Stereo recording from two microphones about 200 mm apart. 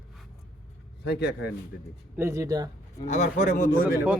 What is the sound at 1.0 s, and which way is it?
Speech, 55° left (ahead or behind).